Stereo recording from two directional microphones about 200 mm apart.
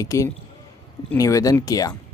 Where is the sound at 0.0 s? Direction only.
15° left (ahead or behind).